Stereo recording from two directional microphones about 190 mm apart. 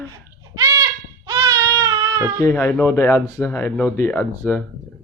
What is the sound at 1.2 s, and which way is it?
Baby cry, 20° right (ahead or behind).